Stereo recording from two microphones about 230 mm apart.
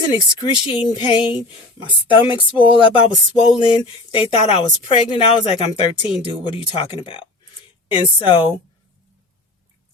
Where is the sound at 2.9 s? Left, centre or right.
Left.